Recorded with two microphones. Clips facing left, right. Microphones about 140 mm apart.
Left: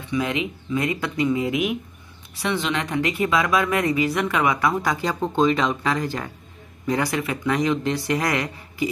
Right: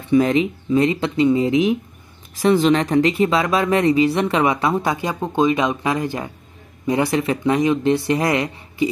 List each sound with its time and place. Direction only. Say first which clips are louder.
0.1 s speech: right 9 dB; 35° right (ahead or behind)
2.4 s speech: right 9 dB; 40° right (ahead or behind); by 8.8 s 25° right (ahead or behind)